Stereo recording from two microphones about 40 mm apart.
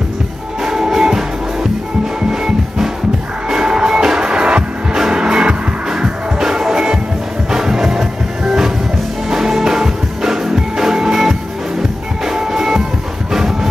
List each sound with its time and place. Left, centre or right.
0.7 s music: centre
3.4 s music: centre